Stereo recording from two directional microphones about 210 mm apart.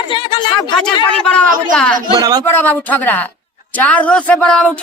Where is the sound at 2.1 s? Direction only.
15° right (ahead or behind).